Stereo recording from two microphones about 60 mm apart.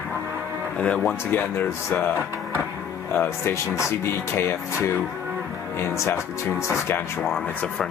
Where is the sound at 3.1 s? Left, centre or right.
Left.